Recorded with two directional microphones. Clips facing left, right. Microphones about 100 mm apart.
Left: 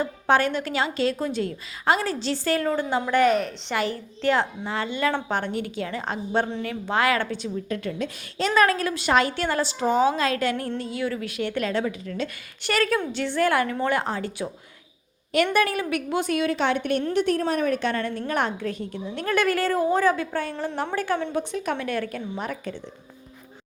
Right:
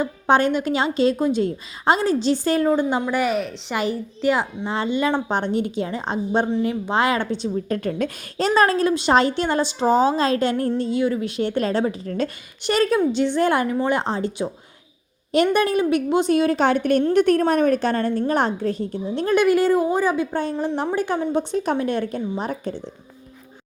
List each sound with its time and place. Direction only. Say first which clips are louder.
0.0 s a woman's voice: right 3 dB; 20° right (ahead or behind); by 3.8 s 5° right (ahead or behind)
3.8 s a woman's voice: right 4 dB; 15° right (ahead or behind)
7.7 s a woman's voice: right 4 dB; 45° right (ahead or behind)
8.4 s a woman's voice: right 3 dB; 35° right (ahead or behind)
12.6 s a woman's voice: right 5 dB; 20° right (ahead or behind)
15.5 s a woman's voice: right 5 dB; 25° right (ahead or behind)
21.5 s a woman's voice: right 5 dB; 30° right (ahead or behind)